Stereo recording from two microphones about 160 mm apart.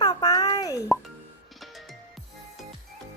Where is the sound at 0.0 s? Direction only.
20° left (ahead or behind).